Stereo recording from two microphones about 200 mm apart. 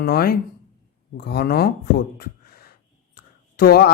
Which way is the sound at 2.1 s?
50° left (ahead or behind).